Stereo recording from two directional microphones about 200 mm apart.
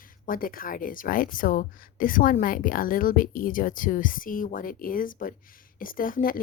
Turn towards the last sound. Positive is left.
turn(degrees=45)  # may be behind; listen again after turning